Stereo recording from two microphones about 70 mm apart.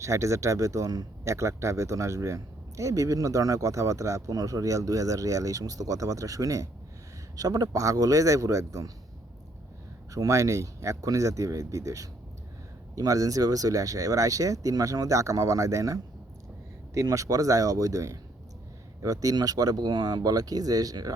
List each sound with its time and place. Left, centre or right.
0.0 s a man's voice: right
1.2 s a man's voice: right
10.2 s a man's voice: right